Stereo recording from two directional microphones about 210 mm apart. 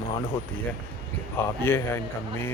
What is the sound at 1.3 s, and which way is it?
Speech, 10° left (ahead or behind).